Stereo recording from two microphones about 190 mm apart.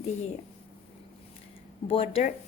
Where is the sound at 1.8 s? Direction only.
30° left (ahead or behind).